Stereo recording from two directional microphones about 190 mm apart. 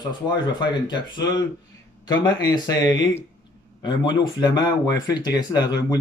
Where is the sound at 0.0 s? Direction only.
25° left (ahead or behind).